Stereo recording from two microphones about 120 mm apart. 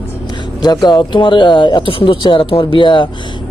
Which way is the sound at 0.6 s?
35° left (ahead or behind).